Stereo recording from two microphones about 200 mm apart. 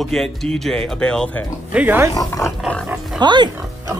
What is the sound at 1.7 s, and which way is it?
Speech, 10° right (ahead or behind).